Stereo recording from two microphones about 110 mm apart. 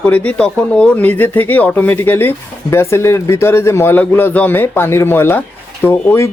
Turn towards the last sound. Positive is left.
turn(degrees=20)  # may be behind; listen again after turning